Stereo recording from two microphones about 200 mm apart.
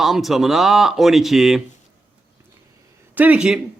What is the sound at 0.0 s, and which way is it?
Speech, centre (ahead or behind).